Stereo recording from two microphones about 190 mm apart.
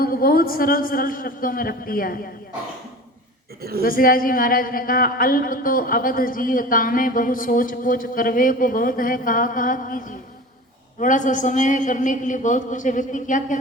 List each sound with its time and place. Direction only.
0.0 s speech: 50° left (ahead or behind)
3.6 s a woman's voice: 55° right (ahead or behind)
3.8 s a man's voice: 50° left (ahead or behind)